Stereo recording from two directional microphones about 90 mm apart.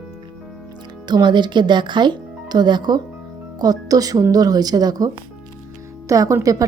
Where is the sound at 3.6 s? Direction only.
45° right (ahead or behind).